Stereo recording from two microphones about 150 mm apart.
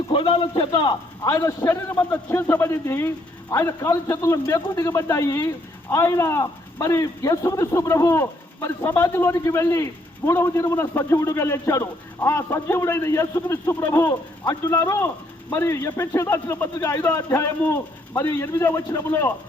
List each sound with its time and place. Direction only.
0.1 s a man's voice: 35° left (ahead or behind); by 19.3 s 20° left (ahead or behind)